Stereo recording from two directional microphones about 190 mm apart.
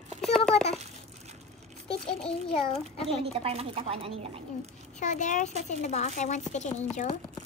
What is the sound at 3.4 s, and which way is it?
Speech, 30° right (ahead or behind).